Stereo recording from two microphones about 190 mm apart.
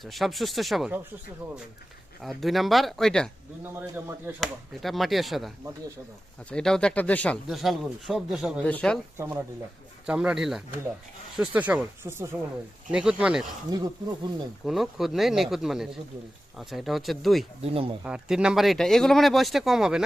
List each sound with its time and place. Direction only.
0.0 s speech: centre (ahead or behind)
2.2 s speech: centre (ahead or behind)
3.6 s speech: 10° right (ahead or behind)
6.5 s speech: 5° left (ahead or behind)
9.1 s speech: 15° right (ahead or behind)
13.7 s speech: 20° right (ahead or behind)
14.6 s speech: centre (ahead or behind)
17.6 s speech: 30° right (ahead or behind)
18.0 s speech: 5° right (ahead or behind)